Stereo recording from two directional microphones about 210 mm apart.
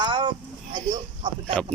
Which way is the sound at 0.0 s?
25° right (ahead or behind).